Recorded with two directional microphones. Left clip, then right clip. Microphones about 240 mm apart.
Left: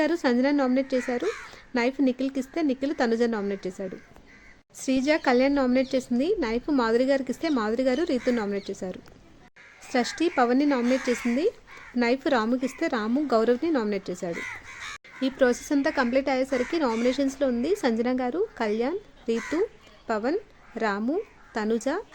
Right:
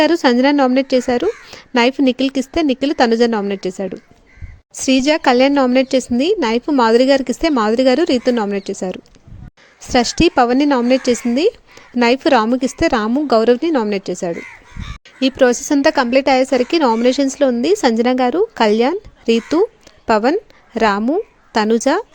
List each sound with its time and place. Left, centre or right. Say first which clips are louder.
0.0 s a woman's voice: right 11 dB; right